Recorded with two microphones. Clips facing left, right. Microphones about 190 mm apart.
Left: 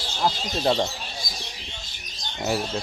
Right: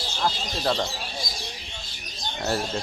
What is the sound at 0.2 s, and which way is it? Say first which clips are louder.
Speech: left 3 dB; 20° left (ahead or behind).